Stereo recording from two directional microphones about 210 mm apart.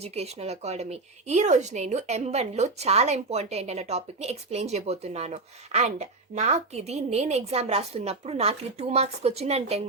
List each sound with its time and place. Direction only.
0.0 s a woman's voice: 30° right (ahead or behind)